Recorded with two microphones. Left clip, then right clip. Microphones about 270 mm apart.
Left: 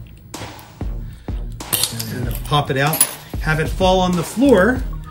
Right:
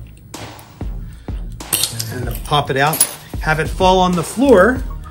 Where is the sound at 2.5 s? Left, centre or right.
Right.